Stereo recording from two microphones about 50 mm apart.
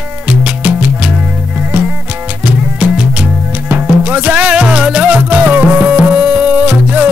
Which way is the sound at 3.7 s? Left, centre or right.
Right.